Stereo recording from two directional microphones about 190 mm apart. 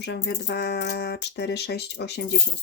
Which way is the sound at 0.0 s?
60° left (ahead or behind).